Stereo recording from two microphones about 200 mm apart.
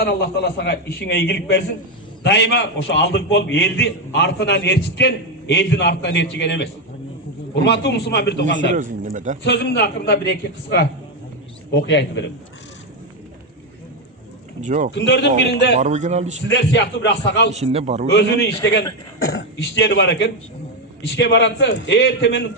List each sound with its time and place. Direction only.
0.0 s a man's voice: 55° left (ahead or behind)
8.7 s speech: 40° right (ahead or behind)
9.4 s a man's voice: 55° left (ahead or behind)
14.6 s speech: 40° right (ahead or behind)
14.9 s a man's voice: 60° left (ahead or behind)
15.7 s speech: 35° right (ahead or behind)
16.5 s a man's voice: 60° left (ahead or behind)
17.5 s speech: 30° right (ahead or behind)
18.1 s a man's voice: 55° left (ahead or behind)